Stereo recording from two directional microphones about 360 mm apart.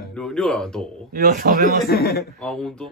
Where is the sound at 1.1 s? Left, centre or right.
Right.